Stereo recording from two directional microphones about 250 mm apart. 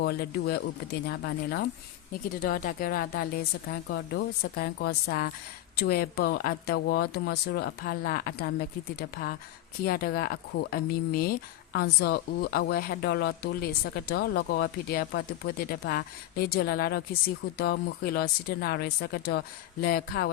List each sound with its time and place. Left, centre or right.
0.0 s speech: left